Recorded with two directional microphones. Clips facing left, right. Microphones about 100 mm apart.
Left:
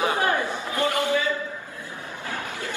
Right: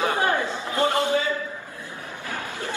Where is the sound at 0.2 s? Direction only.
20° right (ahead or behind).